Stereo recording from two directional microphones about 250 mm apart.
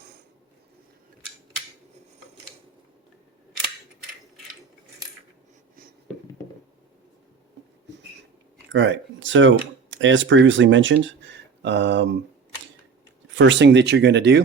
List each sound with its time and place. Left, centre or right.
8.7 s speech: right
13.3 s speech: right